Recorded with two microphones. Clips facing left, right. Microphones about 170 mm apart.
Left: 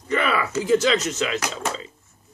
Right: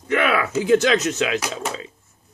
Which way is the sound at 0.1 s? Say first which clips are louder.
Right 3 dB; 70° right (ahead or behind).